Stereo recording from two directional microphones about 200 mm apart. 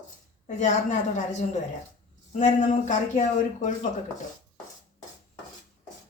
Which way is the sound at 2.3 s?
35° left (ahead or behind).